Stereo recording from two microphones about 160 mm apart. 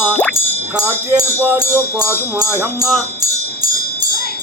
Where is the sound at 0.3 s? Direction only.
25° right (ahead or behind).